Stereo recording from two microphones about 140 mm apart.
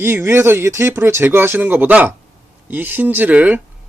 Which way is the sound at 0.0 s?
15° right (ahead or behind).